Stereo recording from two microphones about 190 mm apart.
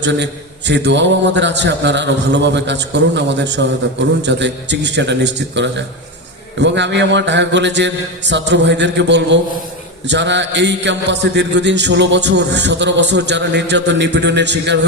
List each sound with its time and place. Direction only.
0.0 s a man's voice: 65° right (ahead or behind)